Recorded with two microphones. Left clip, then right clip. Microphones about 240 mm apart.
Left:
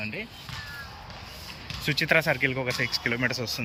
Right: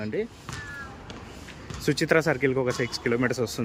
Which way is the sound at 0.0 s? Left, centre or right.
Centre.